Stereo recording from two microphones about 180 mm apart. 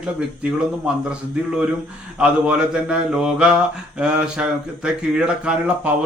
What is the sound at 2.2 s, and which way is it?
Mantra, 5° right (ahead or behind).